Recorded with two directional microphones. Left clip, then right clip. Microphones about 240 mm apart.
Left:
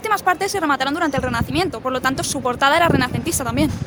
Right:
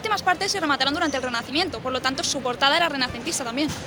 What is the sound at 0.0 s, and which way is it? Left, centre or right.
Speech, left.